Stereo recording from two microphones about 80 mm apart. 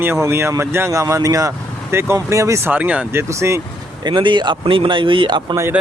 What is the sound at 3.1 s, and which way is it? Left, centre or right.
Speech, right.